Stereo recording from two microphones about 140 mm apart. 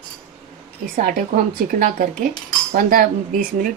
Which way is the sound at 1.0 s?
85° right.